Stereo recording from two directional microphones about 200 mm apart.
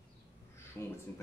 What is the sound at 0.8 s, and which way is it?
Speech, 10° left (ahead or behind).